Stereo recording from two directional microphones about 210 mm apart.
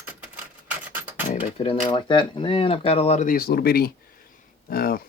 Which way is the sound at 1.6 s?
25° left (ahead or behind).